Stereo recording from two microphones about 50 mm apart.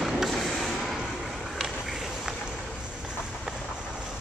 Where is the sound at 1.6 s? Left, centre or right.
Centre.